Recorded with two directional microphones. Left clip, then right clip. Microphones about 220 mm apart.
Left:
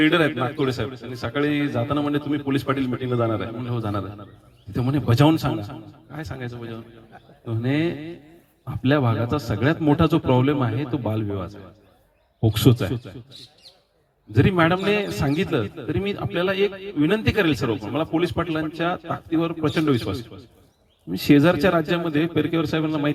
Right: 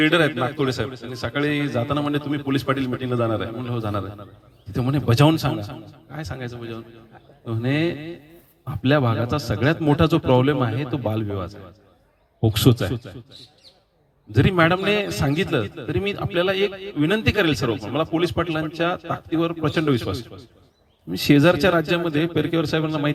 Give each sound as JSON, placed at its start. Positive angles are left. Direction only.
{"t": 0.0, "sound": "a man's voice", "side_deg": -40}
{"t": 14.3, "sound": "a man's voice", "side_deg": -40}